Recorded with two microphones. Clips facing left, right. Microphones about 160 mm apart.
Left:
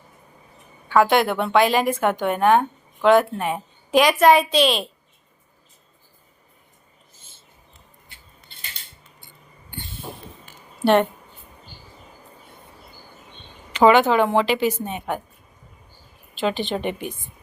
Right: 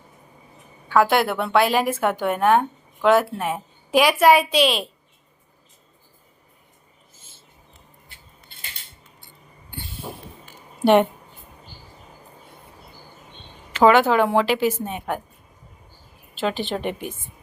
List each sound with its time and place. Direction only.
0.9 s a woman's voice: 5° right (ahead or behind)
10.8 s speech: 15° right (ahead or behind)
13.7 s a woman's voice: 5° right (ahead or behind)
16.3 s a woman's voice: 5° right (ahead or behind)